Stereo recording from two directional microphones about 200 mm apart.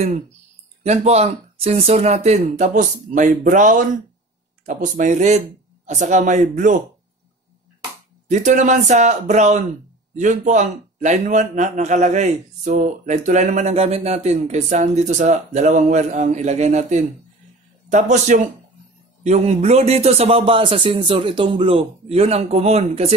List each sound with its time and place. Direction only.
0.8 s a man's voice: 35° right (ahead or behind)
8.3 s a man's voice: 35° right (ahead or behind)